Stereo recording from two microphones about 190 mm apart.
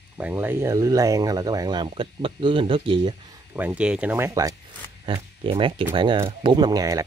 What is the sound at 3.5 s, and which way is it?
Speech, 5° right (ahead or behind).